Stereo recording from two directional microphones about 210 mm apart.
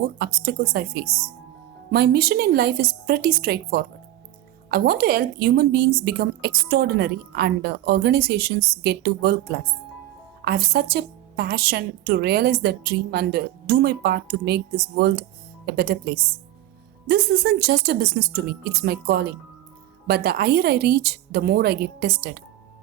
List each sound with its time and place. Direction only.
0.4 s a woman's voice: 50° right (ahead or behind)
10.4 s a woman's voice: 45° right (ahead or behind)